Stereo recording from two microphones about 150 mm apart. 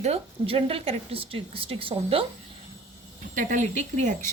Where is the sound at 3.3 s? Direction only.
55° right (ahead or behind).